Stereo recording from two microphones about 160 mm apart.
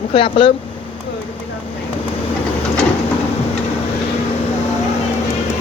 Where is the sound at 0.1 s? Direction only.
30° left (ahead or behind).